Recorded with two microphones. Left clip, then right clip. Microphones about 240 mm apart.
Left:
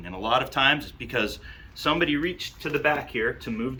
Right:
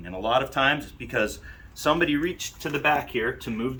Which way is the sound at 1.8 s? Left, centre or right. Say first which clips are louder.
Right 1 dB; right.